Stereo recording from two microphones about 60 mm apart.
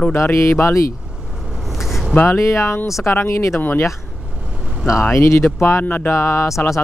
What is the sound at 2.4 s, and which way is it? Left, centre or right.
Speech, left.